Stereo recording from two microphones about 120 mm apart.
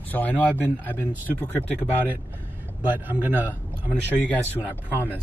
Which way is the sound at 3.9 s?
15° left (ahead or behind).